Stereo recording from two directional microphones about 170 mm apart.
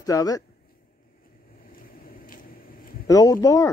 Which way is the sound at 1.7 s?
60° left (ahead or behind).